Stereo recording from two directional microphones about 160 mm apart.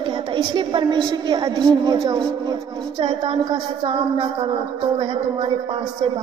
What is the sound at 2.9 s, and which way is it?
A woman's voice, 35° right (ahead or behind).